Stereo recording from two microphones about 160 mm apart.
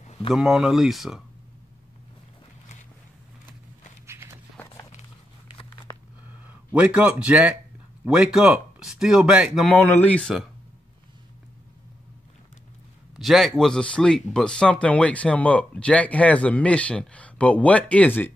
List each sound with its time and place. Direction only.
0.0 s a sound: 40° left (ahead or behind)
0.3 s speech: 5° right (ahead or behind)
4.1 s horse: 15° right (ahead or behind)
6.4 s speech: 10° right (ahead or behind)
9.8 s speech: 10° left (ahead or behind)
13.1 s speech: centre (ahead or behind)